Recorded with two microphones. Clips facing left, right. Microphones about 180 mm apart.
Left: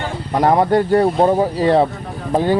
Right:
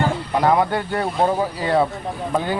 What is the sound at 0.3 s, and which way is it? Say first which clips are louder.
Speech: left 5 dB; 35° left (ahead or behind).